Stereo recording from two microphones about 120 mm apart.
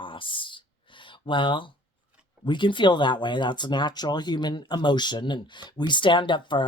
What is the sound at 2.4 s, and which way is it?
Speech, 40° left (ahead or behind).